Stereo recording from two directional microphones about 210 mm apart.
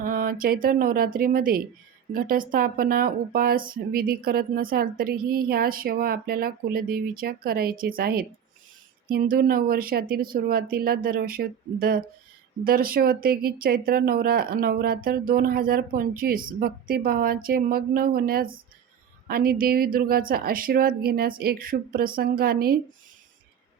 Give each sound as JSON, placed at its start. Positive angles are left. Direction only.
{"t": 0.0, "sound": "speech", "side_deg": -40}